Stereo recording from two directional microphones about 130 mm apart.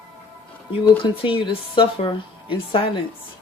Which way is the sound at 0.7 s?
40° left (ahead or behind).